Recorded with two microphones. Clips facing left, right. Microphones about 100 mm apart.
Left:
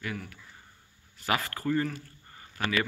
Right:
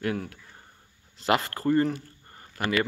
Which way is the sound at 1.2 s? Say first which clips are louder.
Right 5 dB; 20° right (ahead or behind).